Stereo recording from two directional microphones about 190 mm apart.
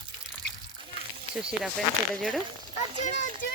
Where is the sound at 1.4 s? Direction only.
5° right (ahead or behind).